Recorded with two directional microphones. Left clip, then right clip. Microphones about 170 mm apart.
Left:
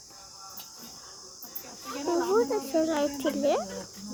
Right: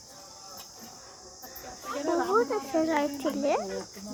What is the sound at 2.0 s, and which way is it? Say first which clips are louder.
Speech: even; 15° left (ahead or behind).